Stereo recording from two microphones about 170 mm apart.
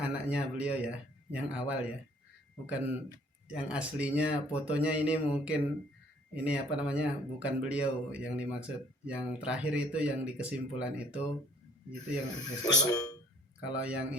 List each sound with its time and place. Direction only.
0.0 s speech: 5° right (ahead or behind)
12.3 s speech: 25° left (ahead or behind)
13.7 s speech: 5° right (ahead or behind)